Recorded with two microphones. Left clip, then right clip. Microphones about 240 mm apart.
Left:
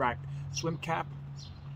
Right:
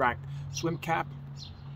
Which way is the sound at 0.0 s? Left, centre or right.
Centre.